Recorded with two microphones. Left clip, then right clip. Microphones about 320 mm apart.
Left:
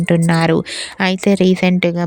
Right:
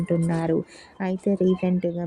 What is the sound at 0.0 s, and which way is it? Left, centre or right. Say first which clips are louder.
Speech: left 10 dB; left.